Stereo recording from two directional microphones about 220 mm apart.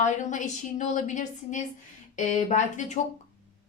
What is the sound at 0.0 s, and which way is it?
Speech, 35° left (ahead or behind).